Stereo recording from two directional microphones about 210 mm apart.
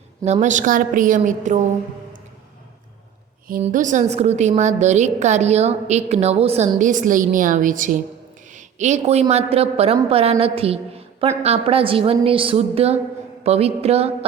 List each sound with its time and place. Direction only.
0.3 s a woman's voice: 35° right (ahead or behind)
3.6 s a woman's voice: 35° right (ahead or behind)